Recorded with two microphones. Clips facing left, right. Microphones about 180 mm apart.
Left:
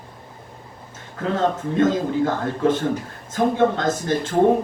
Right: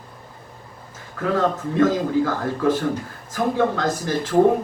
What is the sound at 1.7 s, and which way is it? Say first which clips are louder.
A man's voice: right 2 dB; 25° left (ahead or behind).